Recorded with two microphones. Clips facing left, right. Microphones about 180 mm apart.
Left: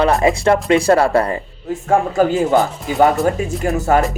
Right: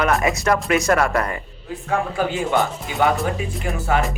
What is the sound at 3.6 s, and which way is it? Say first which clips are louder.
Speech: left 6 dB; 45° left (ahead or behind).